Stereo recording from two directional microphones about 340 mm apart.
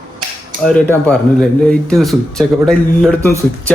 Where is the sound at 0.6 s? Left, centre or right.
Centre.